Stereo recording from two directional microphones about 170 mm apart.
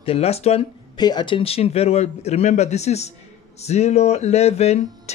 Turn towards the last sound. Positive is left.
turn(degrees=40)  # may be behind; listen again after turning